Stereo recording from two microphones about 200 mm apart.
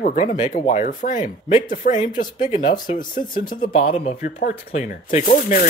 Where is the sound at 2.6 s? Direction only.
25° left (ahead or behind).